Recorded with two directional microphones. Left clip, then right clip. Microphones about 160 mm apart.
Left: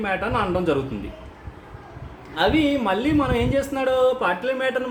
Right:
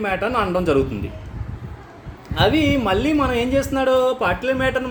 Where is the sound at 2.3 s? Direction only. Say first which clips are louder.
Right 2 dB; 40° right (ahead or behind).